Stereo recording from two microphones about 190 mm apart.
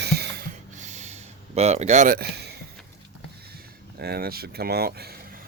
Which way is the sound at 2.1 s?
60° right (ahead or behind).